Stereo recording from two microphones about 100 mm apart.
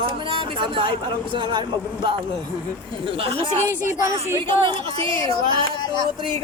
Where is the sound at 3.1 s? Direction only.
65° right (ahead or behind).